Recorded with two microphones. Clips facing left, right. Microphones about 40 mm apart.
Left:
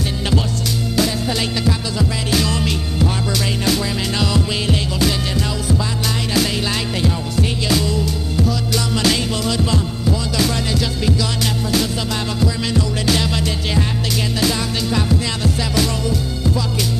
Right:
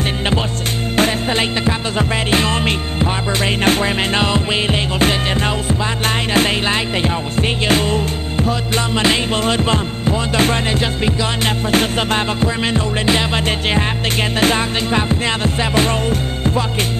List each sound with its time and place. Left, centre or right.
0.9 s music: right
14.4 s music: right